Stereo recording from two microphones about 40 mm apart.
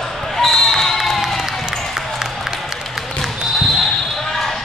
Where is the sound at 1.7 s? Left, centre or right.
Centre.